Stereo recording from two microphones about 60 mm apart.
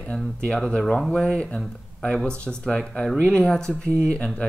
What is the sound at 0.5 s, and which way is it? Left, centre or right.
Speech, centre.